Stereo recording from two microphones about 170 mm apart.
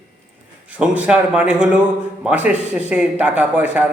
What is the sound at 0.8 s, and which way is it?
A man's voice, 10° right (ahead or behind).